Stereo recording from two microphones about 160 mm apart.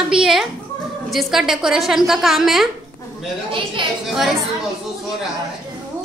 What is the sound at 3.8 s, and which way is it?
Speech, 30° right (ahead or behind).